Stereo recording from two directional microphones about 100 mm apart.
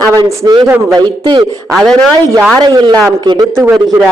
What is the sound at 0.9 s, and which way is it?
Speech, 50° right (ahead or behind).